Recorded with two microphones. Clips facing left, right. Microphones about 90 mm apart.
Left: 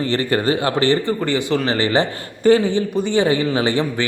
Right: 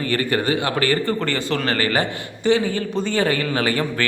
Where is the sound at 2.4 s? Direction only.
40° left (ahead or behind).